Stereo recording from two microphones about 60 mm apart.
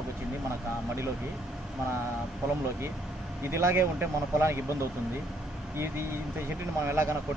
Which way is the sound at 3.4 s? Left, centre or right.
Right.